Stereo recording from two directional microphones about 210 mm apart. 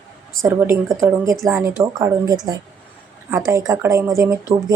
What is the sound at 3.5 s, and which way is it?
Speech, 15° right (ahead or behind).